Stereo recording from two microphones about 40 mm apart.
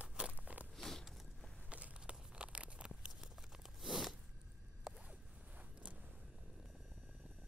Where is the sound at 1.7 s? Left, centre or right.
Right.